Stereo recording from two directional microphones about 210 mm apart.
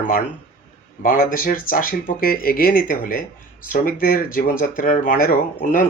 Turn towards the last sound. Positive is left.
turn(degrees=40)  # may be behind; listen again after turning